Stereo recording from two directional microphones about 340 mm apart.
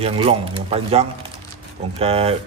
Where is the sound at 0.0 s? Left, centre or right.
Centre.